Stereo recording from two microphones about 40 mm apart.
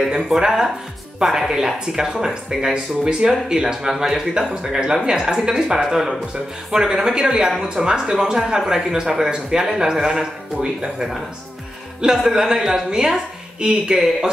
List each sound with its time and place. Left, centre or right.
0.0 s a woman's voice: centre